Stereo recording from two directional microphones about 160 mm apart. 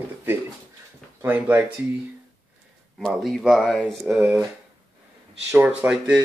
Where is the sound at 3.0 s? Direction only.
Centre (ahead or behind).